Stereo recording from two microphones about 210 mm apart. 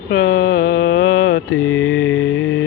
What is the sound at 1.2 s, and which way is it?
Mantra, 75° left (ahead or behind).